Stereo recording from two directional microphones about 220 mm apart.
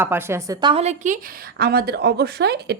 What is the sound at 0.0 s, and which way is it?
A woman's voice, 10° right (ahead or behind).